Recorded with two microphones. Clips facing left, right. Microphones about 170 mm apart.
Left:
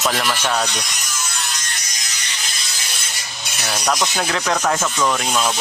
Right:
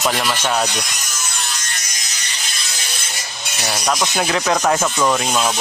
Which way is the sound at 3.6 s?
10° right (ahead or behind).